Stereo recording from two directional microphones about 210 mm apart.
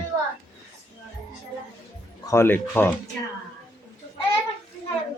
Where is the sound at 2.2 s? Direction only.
10° left (ahead or behind).